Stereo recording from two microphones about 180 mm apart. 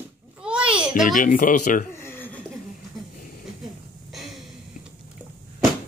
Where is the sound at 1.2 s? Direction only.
50° left (ahead or behind).